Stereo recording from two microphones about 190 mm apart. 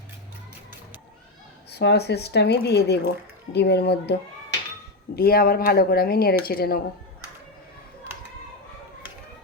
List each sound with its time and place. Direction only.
1.7 s speech: 60° left (ahead or behind)
5.1 s speech: 55° left (ahead or behind)